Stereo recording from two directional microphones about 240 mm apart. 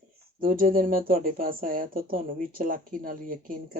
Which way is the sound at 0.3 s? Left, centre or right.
Right.